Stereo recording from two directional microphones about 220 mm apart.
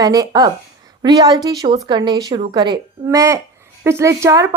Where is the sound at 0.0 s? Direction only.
15° right (ahead or behind).